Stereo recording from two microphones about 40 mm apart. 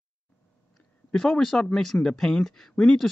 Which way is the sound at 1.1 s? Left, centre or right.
Centre.